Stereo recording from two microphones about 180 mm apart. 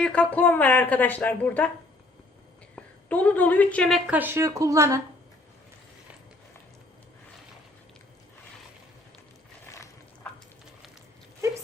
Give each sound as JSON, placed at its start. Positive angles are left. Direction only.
{"t": 0.0, "sound": "a woman's voice", "side_deg": 5}
{"t": 2.7, "sound": "a woman's voice", "side_deg": 5}